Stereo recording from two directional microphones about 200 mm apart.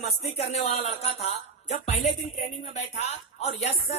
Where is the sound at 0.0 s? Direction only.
35° left (ahead or behind).